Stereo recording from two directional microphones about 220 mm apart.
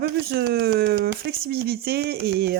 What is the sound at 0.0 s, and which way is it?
Speech, 45° right (ahead or behind).